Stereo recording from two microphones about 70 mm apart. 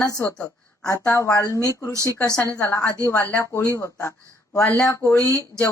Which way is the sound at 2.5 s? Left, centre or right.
Left.